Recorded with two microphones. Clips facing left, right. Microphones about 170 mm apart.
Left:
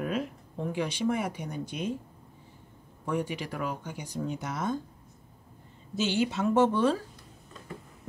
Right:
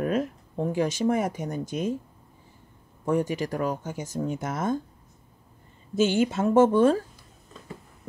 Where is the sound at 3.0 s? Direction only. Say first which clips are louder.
Right 6 dB; 45° right (ahead or behind).